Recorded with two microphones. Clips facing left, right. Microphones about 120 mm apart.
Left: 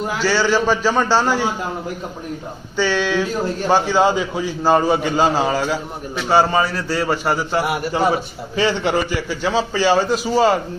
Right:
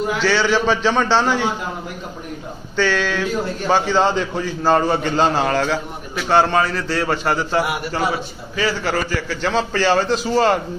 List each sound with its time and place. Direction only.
0.2 s a man's voice: 10° left (ahead or behind)
2.7 s a man's voice: 15° left (ahead or behind)
8.0 s a man's voice: 30° left (ahead or behind); by 10.6 s 5° left (ahead or behind)